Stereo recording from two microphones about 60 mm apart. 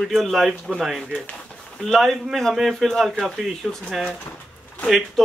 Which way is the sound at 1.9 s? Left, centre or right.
Centre.